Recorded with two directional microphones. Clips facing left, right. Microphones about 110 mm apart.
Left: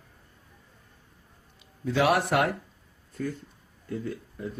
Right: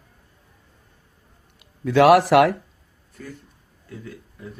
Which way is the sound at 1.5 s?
70° right (ahead or behind).